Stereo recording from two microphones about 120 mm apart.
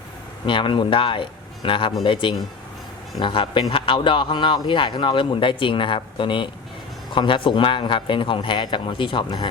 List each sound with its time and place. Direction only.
0.4 s a man's voice: 45° left (ahead or behind)